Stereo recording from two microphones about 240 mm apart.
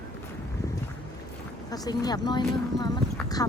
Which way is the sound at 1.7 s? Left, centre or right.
Centre.